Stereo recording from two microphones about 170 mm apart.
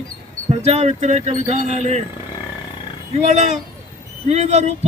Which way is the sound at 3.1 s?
45° right (ahead or behind).